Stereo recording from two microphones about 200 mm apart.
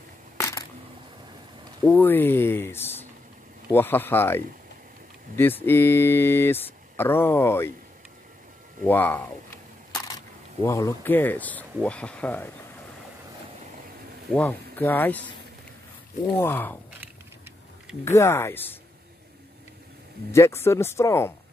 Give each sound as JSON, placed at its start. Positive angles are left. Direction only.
{"t": 0.4, "sound": "a sound", "side_deg": 15}
{"t": 1.9, "sound": "speech", "side_deg": 10}
{"t": 8.8, "sound": "speech", "side_deg": 10}
{"t": 14.3, "sound": "speech", "side_deg": 10}
{"t": 16.3, "sound": "speech", "side_deg": 10}
{"t": 18.0, "sound": "speech", "side_deg": 15}
{"t": 20.2, "sound": "speech", "side_deg": 15}